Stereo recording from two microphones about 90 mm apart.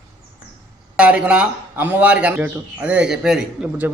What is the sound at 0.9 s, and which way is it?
A man's voice, 10° right (ahead or behind).